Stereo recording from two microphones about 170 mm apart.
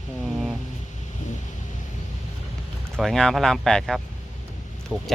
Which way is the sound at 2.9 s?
5° left (ahead or behind).